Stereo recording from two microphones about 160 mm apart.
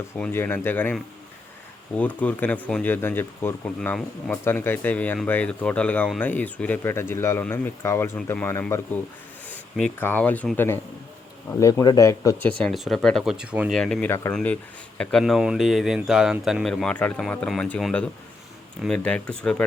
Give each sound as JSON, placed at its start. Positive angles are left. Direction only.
{"t": 0.2, "sound": "speech", "side_deg": 15}
{"t": 2.0, "sound": "speech", "side_deg": 10}
{"t": 11.6, "sound": "speech", "side_deg": 25}
{"t": 12.5, "sound": "speech", "side_deg": 5}
{"t": 13.7, "sound": "speech", "side_deg": 5}
{"t": 15.2, "sound": "speech", "side_deg": -5}